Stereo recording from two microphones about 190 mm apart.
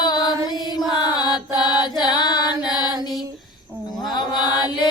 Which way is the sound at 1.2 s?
25° left (ahead or behind).